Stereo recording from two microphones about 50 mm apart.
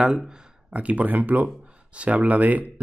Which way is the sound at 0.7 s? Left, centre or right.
Right.